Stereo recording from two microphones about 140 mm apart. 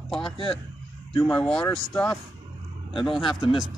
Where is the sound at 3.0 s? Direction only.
35° left (ahead or behind).